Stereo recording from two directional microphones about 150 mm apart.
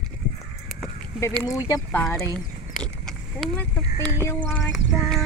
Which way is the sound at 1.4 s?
20° left (ahead or behind).